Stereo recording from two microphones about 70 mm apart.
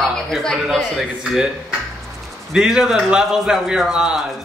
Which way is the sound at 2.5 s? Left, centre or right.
Centre.